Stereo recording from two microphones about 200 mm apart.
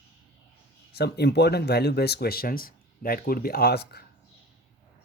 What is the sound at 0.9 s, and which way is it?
Speech, 55° left (ahead or behind).